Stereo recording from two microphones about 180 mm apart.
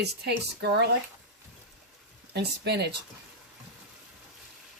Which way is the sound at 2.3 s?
65° right (ahead or behind).